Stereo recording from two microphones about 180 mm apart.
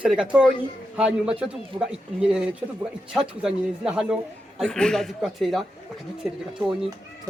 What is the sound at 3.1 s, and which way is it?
A man's voice, 5° right (ahead or behind).